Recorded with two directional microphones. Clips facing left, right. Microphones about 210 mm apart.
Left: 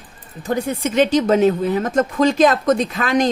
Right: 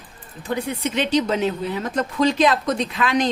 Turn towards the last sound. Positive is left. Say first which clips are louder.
# left 3 dB
turn(degrees=45)  # may be behind; listen again after turning